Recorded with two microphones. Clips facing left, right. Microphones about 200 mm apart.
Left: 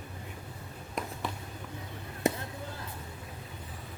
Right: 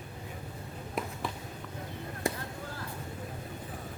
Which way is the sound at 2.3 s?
20° left (ahead or behind).